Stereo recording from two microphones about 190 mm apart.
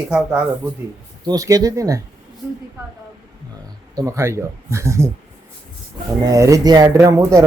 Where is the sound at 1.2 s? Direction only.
20° right (ahead or behind).